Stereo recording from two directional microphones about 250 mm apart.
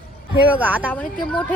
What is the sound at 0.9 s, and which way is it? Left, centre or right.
Speech, centre.